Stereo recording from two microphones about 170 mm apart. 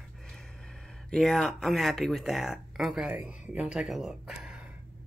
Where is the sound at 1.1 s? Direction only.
Centre (ahead or behind).